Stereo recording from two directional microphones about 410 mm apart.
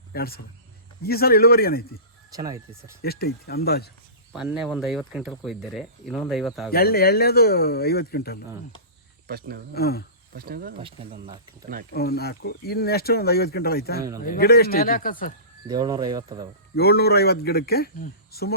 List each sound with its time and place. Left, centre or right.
0.1 s a man's voice: left
2.3 s speech: centre
3.0 s speech: left
4.3 s speech: centre
6.7 s speech: left
9.2 s speech: right
9.7 s speech: left
10.3 s speech: right
11.9 s speech: left
15.6 s speech: centre
16.7 s speech: left